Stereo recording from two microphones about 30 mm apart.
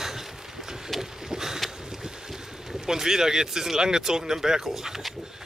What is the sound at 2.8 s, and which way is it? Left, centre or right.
Speech, centre.